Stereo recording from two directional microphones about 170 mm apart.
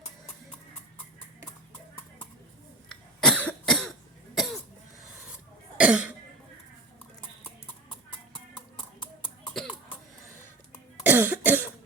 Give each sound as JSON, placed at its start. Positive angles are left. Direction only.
{"t": 2.9, "sound": "cough", "side_deg": 5}
{"t": 5.7, "sound": "cough", "side_deg": -5}
{"t": 8.3, "sound": "music", "side_deg": 30}
{"t": 11.0, "sound": "cough", "side_deg": -10}